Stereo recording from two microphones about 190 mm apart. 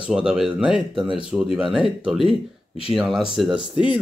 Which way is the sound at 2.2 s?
30° left (ahead or behind).